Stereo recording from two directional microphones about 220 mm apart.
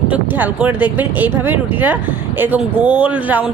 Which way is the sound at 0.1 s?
10° right (ahead or behind).